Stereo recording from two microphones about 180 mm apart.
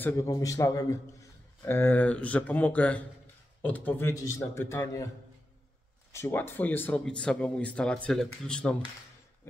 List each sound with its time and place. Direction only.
0.0 s speech: 20° left (ahead or behind)
6.1 s speech: 15° left (ahead or behind)